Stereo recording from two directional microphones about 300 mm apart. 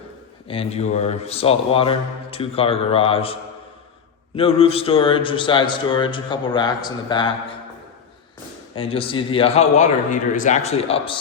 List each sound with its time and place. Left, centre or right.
0.4 s speech: centre
4.4 s a man's voice: centre
8.7 s speech: centre